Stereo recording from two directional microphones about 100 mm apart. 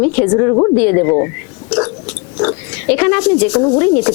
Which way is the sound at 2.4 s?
20° left (ahead or behind).